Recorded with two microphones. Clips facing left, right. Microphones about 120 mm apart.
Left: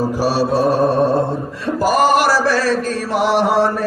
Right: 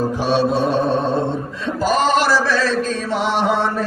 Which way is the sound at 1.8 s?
10° left (ahead or behind).